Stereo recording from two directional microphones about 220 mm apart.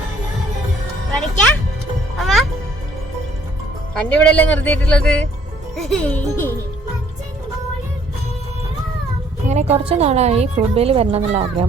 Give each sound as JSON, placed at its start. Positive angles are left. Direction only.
{"t": 2.1, "sound": "music", "side_deg": 0}
{"t": 3.9, "sound": "speech", "side_deg": 5}
{"t": 9.5, "sound": "a woman's voice", "side_deg": -30}